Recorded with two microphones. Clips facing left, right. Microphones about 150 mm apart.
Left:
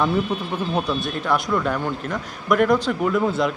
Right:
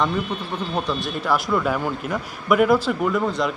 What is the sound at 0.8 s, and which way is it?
A man's voice, centre (ahead or behind).